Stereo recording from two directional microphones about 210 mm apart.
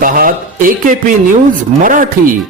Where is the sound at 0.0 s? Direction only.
40° right (ahead or behind).